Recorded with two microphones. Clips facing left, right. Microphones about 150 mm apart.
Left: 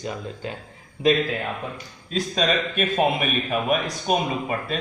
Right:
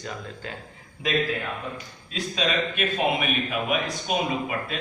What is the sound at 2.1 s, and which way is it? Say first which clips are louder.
A man's voice: left 3 dB; 40° left (ahead or behind).